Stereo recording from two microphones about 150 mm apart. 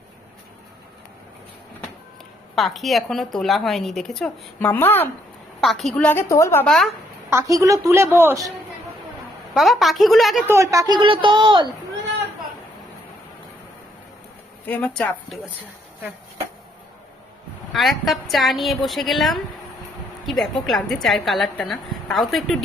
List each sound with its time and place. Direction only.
2.6 s a woman's voice: centre (ahead or behind)
5.5 s a woman's voice: centre (ahead or behind); by 6.7 s 15° left (ahead or behind)
6.7 s a woman's voice: 5° left (ahead or behind)
7.3 s a woman's voice: 20° right (ahead or behind)
9.6 s a woman's voice: centre (ahead or behind)
10.4 s a woman's voice: 20° right (ahead or behind)
14.7 s a woman's voice: 10° left (ahead or behind)
17.7 s a woman's voice: centre (ahead or behind)